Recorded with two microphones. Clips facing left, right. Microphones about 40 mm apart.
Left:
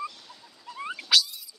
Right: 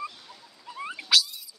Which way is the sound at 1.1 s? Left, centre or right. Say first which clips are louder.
Even; centre.